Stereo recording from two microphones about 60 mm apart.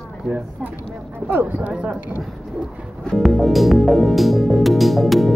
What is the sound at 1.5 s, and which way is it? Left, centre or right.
Speech, right.